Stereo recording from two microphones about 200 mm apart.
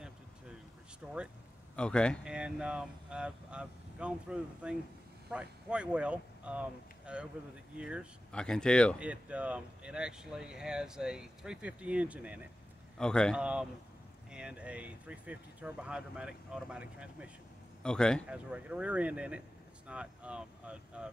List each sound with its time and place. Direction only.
1.0 s speech: 5° right (ahead or behind)
9.0 s speech: 5° right (ahead or behind)
12.9 s speech: 5° left (ahead or behind)